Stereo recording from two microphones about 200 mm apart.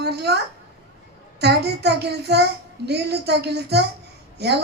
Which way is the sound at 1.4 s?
55° right (ahead or behind).